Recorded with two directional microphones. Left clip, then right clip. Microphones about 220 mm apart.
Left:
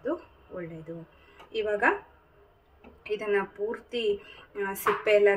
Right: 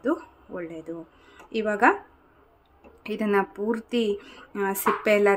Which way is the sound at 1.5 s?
55° right (ahead or behind).